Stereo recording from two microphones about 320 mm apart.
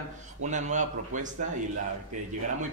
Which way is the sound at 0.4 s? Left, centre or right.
Right.